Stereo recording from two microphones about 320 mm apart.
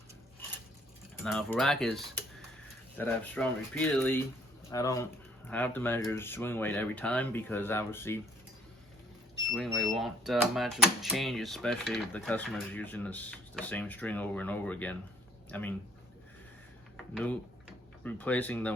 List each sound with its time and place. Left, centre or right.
1.2 s speech: centre
3.0 s speech: centre
9.5 s speech: centre
18.0 s speech: centre